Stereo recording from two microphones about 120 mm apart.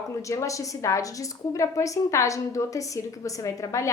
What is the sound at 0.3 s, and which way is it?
A woman's voice, 25° left (ahead or behind).